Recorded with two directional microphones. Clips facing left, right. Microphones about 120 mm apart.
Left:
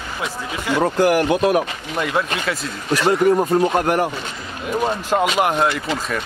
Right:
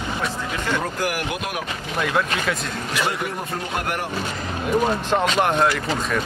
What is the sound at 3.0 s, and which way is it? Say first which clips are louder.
Speech: left 11 dB; 40° left (ahead or behind).